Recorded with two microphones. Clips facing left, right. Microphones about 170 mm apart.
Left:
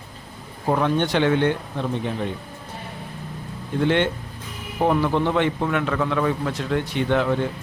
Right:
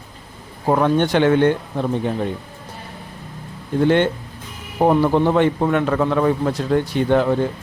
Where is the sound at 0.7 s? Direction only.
45° right (ahead or behind).